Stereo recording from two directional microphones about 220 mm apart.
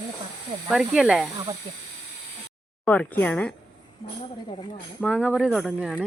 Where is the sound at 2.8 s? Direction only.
5° left (ahead or behind).